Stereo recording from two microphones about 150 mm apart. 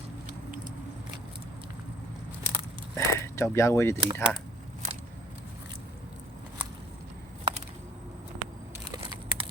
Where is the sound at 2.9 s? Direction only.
20° left (ahead or behind).